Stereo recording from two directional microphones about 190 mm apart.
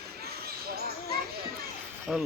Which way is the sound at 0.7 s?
55° right (ahead or behind).